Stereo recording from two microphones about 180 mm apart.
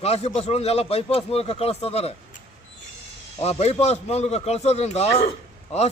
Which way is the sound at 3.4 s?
35° left (ahead or behind).